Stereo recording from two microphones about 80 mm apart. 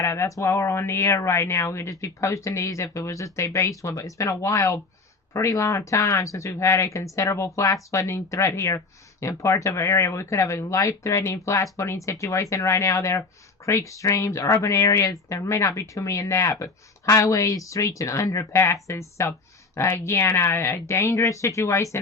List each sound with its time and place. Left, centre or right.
0.0 s speech: left